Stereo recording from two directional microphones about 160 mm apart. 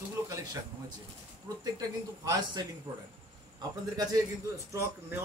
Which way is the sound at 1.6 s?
25° right (ahead or behind).